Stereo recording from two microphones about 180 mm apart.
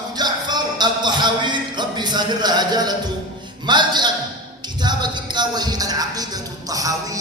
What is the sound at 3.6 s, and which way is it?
Music, 25° right (ahead or behind).